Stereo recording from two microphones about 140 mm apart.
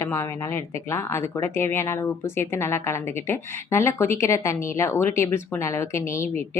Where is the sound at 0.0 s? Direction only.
20° left (ahead or behind).